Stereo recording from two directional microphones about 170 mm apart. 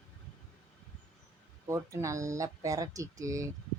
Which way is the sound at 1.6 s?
15° right (ahead or behind).